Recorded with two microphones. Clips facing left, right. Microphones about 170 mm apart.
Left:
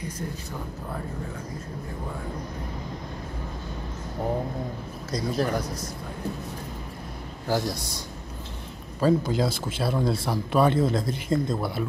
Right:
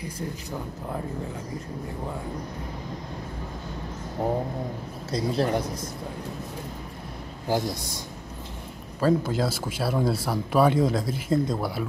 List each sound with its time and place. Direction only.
5.1 s speech: 30° right (ahead or behind)
7.4 s speech: 20° right (ahead or behind)
9.0 s speech: centre (ahead or behind)